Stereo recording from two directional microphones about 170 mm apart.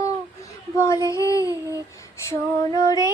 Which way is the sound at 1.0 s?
20° left (ahead or behind).